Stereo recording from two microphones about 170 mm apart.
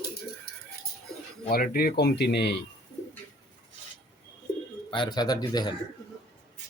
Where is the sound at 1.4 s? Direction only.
65° left (ahead or behind); by 2.6 s 80° left.